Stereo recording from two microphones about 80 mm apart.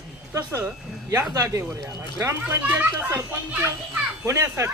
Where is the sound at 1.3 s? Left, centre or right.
Right.